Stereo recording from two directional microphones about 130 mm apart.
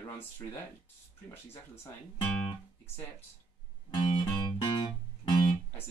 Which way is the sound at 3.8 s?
35° left (ahead or behind).